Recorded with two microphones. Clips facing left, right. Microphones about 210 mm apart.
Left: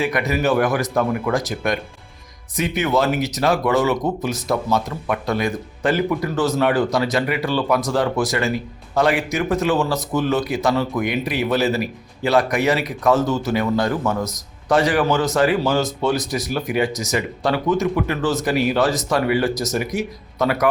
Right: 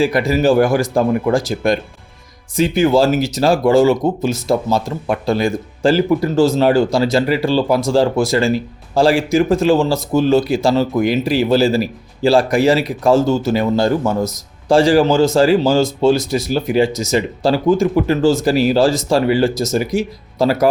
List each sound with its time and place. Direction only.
0.0 s speech: 30° right (ahead or behind)